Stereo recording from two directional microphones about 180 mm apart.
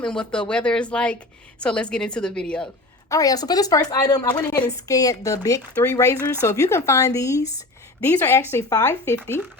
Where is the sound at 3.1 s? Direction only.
20° left (ahead or behind).